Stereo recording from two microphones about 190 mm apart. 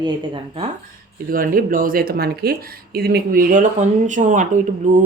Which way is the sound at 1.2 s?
50° right (ahead or behind).